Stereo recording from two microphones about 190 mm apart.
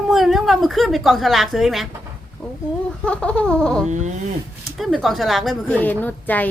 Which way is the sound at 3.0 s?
5° left (ahead or behind).